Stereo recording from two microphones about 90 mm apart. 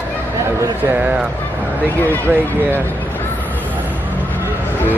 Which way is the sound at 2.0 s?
20° left (ahead or behind).